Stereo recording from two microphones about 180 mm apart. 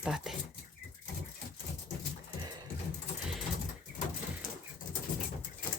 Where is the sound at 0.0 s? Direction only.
5° right (ahead or behind).